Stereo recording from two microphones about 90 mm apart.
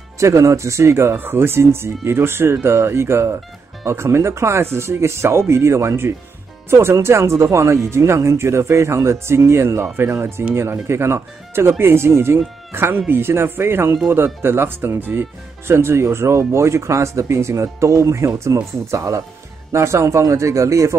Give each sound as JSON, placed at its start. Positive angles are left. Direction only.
{"t": 0.2, "sound": "speech", "side_deg": -35}